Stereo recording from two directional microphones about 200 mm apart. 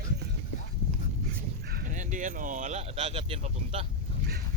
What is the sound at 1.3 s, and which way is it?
Speech, 45° right (ahead or behind).